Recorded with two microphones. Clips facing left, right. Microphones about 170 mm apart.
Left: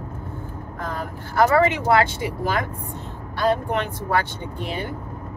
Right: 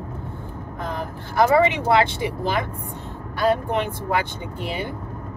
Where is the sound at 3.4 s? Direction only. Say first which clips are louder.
Right 1 dB; 10° right (ahead or behind).